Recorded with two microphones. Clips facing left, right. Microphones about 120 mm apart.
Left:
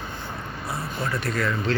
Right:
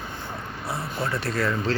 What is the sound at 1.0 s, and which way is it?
Speech, 30° right (ahead or behind).